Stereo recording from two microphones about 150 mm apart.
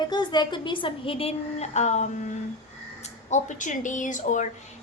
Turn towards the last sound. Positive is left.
turn(degrees=55)  # may be behind; listen again after turning